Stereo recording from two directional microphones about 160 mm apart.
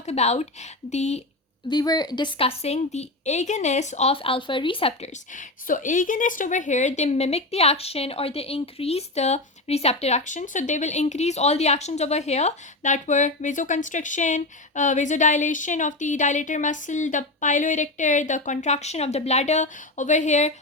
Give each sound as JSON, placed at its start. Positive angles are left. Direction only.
{"t": 0.0, "sound": "a woman's voice", "side_deg": 45}
{"t": 1.6, "sound": "a woman's voice", "side_deg": 25}